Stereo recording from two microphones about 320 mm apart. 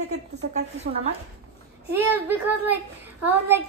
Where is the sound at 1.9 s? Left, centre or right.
Centre.